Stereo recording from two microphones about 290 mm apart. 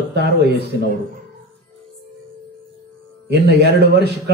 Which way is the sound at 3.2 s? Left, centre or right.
Right.